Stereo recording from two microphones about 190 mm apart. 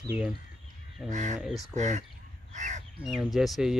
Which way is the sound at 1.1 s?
40° right (ahead or behind).